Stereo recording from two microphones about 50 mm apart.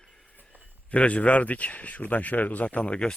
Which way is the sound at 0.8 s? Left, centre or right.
Left.